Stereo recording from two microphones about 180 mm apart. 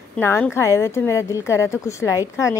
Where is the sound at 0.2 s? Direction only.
15° left (ahead or behind).